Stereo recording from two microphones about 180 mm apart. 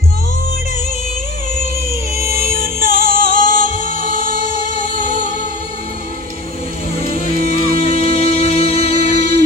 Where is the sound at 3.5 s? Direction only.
50° right (ahead or behind).